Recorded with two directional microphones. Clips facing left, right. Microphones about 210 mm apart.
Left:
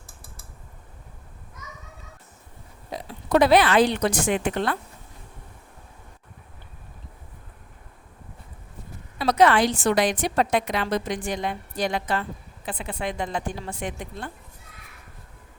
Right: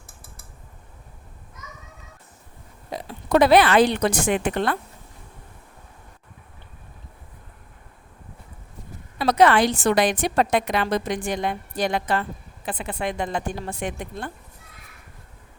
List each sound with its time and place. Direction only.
2.9 s a woman's voice: 60° right (ahead or behind)
9.1 s a woman's voice: 55° right (ahead or behind)